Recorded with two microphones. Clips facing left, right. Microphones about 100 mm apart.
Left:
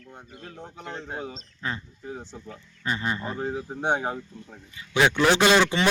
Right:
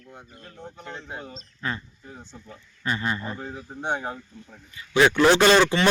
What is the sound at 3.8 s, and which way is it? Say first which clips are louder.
Speech: left 2 dB; 65° left (ahead or behind).